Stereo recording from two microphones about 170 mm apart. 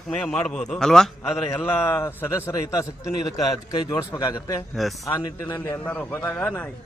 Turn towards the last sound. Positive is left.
turn(degrees=10)  # may be behind; listen again after turning